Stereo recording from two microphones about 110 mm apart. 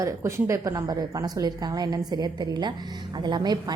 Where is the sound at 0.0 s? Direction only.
25° right (ahead or behind).